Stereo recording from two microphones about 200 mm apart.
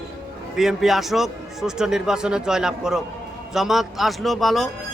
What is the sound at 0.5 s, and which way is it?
A man's voice, centre (ahead or behind).